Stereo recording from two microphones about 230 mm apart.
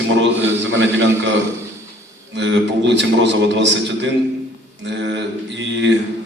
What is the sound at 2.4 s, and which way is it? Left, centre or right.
A man's voice, right.